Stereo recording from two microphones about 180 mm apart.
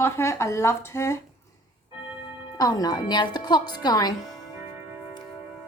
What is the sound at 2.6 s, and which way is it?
Speech, 20° left (ahead or behind).